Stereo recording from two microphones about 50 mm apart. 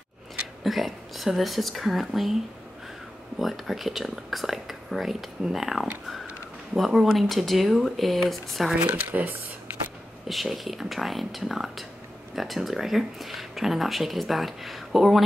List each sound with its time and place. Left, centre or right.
0.7 s speech: centre
3.3 s speech: centre
8.7 s speech: right
10.2 s speech: centre